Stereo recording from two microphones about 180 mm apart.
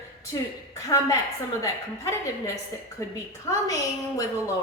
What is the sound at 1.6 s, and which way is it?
Speech, 15° left (ahead or behind).